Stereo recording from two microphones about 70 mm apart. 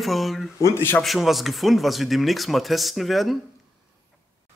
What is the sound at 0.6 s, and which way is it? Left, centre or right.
Speech, left.